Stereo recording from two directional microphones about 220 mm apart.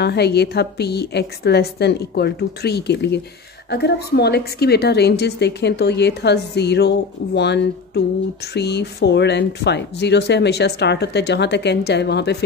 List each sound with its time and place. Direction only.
0.0 s speech: 50° left (ahead or behind)